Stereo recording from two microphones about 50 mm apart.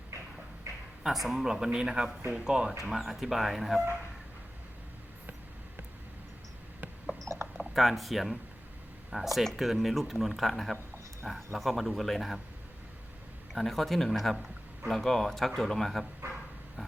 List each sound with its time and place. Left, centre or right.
1.0 s a man's voice: centre
2.9 s speech: centre
7.2 s a sound: right
7.6 s speech: centre
13.5 s speech: centre